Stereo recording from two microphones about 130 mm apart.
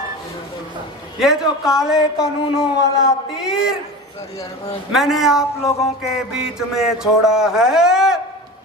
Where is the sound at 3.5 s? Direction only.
5° right (ahead or behind).